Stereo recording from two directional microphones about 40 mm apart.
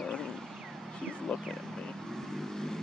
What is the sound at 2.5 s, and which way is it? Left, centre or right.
Vehicle, centre.